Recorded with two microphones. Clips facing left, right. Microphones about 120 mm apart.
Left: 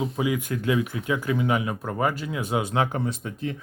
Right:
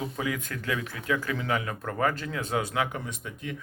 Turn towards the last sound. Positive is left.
turn(degrees=35)  # may be behind; listen again after turning